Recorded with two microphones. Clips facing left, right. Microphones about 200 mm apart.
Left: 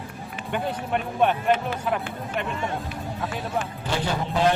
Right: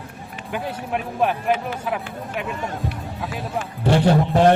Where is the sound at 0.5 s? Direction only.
Centre (ahead or behind).